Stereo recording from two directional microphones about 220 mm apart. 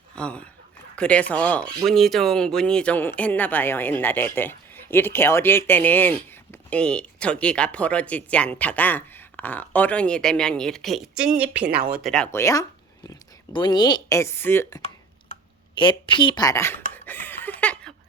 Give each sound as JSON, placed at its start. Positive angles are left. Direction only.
{"t": 0.2, "sound": "speech", "side_deg": 5}
{"t": 15.7, "sound": "speech", "side_deg": 20}
{"t": 16.9, "sound": "a sound", "side_deg": 10}